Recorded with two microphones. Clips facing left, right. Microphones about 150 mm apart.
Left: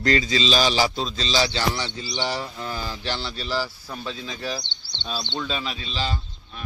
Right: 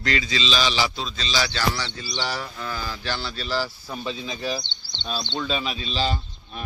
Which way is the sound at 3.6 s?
10° right (ahead or behind).